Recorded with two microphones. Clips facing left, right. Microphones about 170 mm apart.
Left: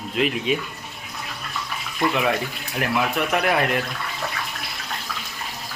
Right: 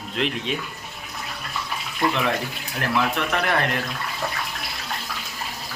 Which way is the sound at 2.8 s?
10° left (ahead or behind).